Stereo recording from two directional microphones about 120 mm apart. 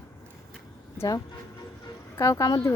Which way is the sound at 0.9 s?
30° left (ahead or behind).